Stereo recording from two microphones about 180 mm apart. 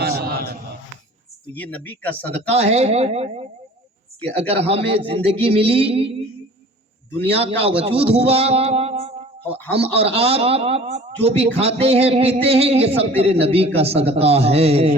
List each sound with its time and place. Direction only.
0.0 s a sound: 60° right (ahead or behind)
1.5 s speech: 10° left (ahead or behind)
2.5 s a man's voice: 35° right (ahead or behind)
7.3 s a man's voice: 30° right (ahead or behind)